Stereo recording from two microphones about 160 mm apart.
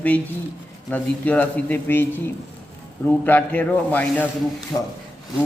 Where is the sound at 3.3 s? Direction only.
10° left (ahead or behind).